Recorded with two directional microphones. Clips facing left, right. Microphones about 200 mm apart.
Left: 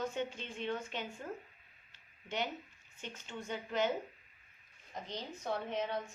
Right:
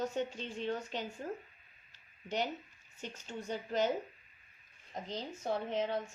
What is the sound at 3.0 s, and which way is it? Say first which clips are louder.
Speech: right 2 dB; 40° right (ahead or behind).